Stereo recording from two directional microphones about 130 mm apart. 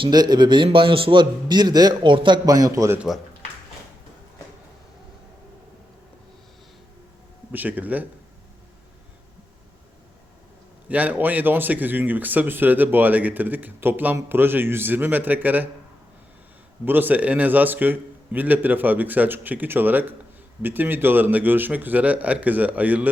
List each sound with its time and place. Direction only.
0.0 s a man's voice: 30° right (ahead or behind)
7.5 s speech: 15° right (ahead or behind)
10.8 s speech: 10° right (ahead or behind)
16.8 s speech: 15° right (ahead or behind)